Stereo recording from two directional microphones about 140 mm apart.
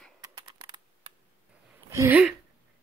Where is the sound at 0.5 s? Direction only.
30° right (ahead or behind).